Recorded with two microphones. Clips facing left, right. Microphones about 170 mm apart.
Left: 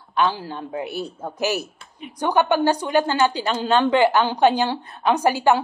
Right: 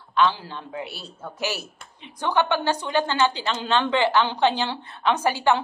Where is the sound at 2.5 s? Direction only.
40° left (ahead or behind).